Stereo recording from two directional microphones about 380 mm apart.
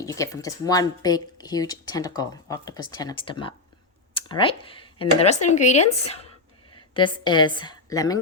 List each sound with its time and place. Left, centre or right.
0.0 s a woman's voice: centre